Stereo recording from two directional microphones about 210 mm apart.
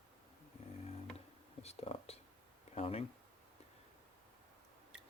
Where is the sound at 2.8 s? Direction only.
30° left (ahead or behind).